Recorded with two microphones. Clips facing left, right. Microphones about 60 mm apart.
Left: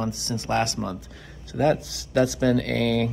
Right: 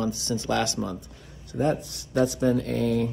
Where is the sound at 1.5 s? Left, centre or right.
Left.